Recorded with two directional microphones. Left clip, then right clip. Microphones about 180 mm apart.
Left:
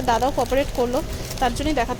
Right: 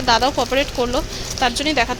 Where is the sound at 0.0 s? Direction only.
10° left (ahead or behind).